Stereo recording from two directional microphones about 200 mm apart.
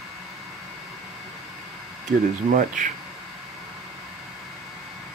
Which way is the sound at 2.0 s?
40° right (ahead or behind).